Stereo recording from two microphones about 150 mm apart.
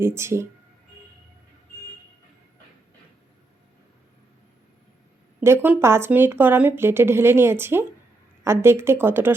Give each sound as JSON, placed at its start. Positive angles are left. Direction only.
{"t": 0.0, "sound": "a woman's voice", "side_deg": -20}
{"t": 5.4, "sound": "a woman's voice", "side_deg": -15}